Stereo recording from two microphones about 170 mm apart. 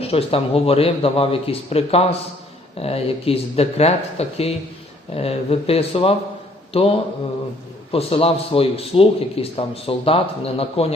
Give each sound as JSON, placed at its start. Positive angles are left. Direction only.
{"t": 0.0, "sound": "a man's voice", "side_deg": 35}
{"t": 7.9, "sound": "a man's voice", "side_deg": 35}